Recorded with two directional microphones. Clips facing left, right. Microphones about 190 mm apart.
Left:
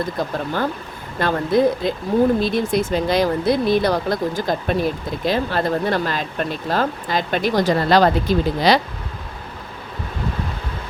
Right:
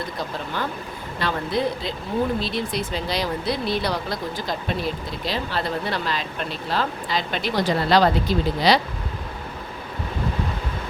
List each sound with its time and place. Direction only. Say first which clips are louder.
0.2 s speech: left 4 dB; 45° left (ahead or behind)